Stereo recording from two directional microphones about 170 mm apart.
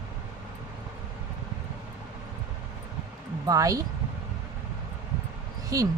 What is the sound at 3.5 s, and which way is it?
Speech, 20° right (ahead or behind).